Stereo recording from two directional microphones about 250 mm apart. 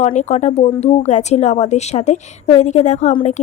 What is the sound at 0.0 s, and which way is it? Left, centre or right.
A woman's voice, left.